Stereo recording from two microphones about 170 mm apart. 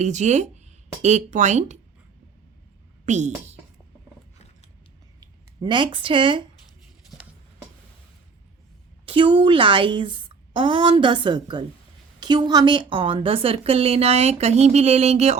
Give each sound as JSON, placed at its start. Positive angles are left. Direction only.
{"t": 0.0, "sound": "speech", "side_deg": -45}
{"t": 3.1, "sound": "speech", "side_deg": -45}
{"t": 5.2, "sound": "speech", "side_deg": -30}
{"t": 9.0, "sound": "a woman's voice", "side_deg": -30}